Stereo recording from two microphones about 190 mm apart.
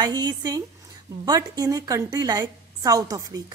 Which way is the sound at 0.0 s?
20° right (ahead or behind).